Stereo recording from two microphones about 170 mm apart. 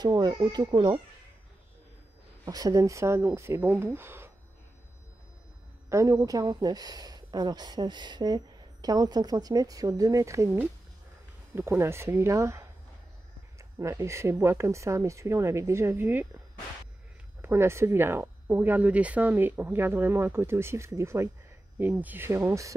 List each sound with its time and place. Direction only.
0.0 s speech: 25° right (ahead or behind)
2.4 s speech: 20° right (ahead or behind)
5.9 s speech: 20° right (ahead or behind)
17.4 s speech: 15° right (ahead or behind)